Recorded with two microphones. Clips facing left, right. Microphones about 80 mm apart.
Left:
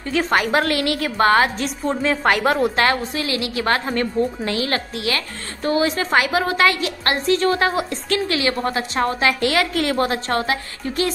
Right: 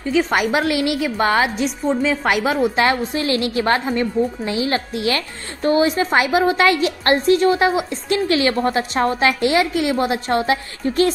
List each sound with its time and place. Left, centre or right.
0.1 s a woman's voice: centre
1.9 s a woman's voice: centre
2.7 s a woman's voice: right
3.9 s a woman's voice: centre
7.5 s a woman's voice: centre